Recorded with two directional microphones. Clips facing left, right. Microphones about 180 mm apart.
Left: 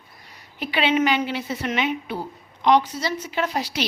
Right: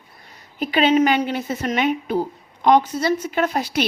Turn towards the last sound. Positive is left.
turn(degrees=-50)  # may be behind; listen again after turning